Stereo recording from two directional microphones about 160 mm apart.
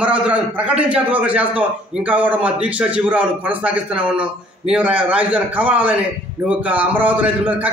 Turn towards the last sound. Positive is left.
turn(degrees=-10)  # may be behind; listen again after turning